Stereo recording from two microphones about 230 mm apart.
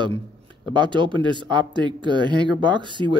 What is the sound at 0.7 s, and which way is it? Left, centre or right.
Speech, right.